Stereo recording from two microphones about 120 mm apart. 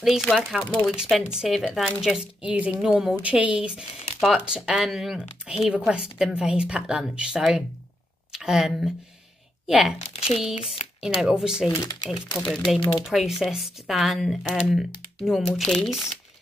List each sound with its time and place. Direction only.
0.0 s speech: centre (ahead or behind)
9.9 s speech: 60° left (ahead or behind)
10.7 s speech: centre (ahead or behind)
11.7 s speech: 30° left (ahead or behind)
12.4 s speech: centre (ahead or behind)